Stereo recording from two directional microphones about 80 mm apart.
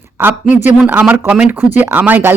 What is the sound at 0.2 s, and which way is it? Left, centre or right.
A woman's voice, right.